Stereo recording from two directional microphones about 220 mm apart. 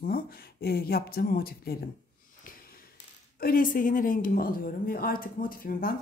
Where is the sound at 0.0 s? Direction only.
45° left (ahead or behind).